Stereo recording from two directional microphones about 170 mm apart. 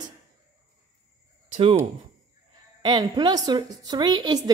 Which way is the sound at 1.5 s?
35° right (ahead or behind).